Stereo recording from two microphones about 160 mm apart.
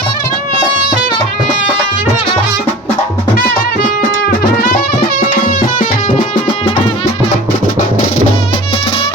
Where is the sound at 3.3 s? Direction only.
65° left (ahead or behind); by 6.3 s 50° left (ahead or behind).